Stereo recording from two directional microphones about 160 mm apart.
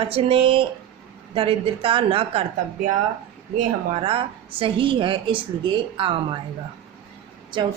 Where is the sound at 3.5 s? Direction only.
55° right (ahead or behind).